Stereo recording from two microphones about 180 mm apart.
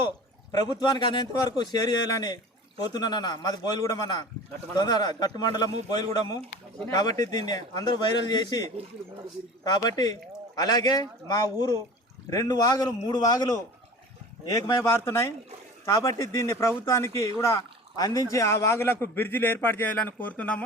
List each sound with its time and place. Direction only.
0.5 s a man's voice: 25° left (ahead or behind)
9.6 s a man's voice: 20° left (ahead or behind)